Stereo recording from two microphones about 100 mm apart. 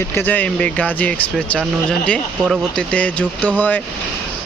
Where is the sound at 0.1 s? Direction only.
20° left (ahead or behind).